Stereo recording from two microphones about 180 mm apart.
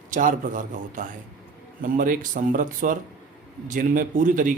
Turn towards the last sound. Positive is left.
turn(degrees=-45)  # may be behind; listen again after turning